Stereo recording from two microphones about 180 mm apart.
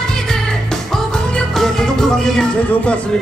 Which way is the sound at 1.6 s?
Centre (ahead or behind).